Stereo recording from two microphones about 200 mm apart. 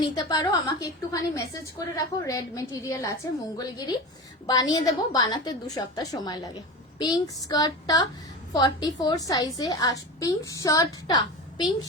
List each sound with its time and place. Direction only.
0.0 s a woman's voice: 20° left (ahead or behind)